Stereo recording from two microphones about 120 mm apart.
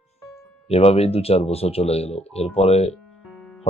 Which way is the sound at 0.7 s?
60° left (ahead or behind).